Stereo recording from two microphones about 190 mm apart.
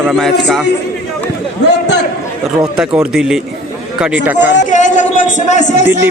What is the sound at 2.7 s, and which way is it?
Speech, 5° right (ahead or behind).